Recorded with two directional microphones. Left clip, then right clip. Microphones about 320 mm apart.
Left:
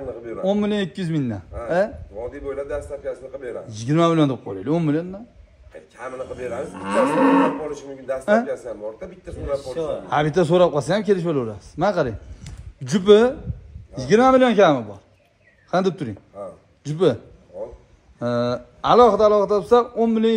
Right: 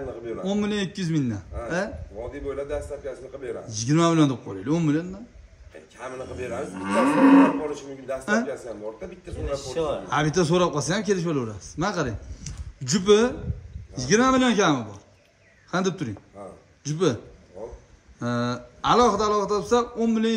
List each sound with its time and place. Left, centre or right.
0.3 s a man's voice: centre
6.7 s moo: centre
8.1 s a man's voice: centre
12.4 s a sound: centre
13.9 s a man's voice: centre
18.2 s a man's voice: centre